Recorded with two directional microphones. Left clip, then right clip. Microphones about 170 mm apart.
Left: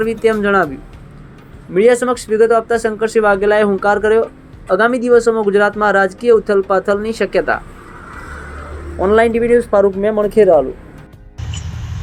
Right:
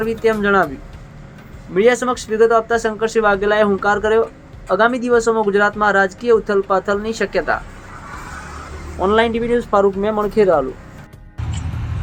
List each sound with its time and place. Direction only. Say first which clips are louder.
0.0 s speech: left 2 dB; 15° left (ahead or behind)
1.7 s speech: left 3 dB; 10° left (ahead or behind)
9.0 s speech: left 4 dB; 10° left (ahead or behind)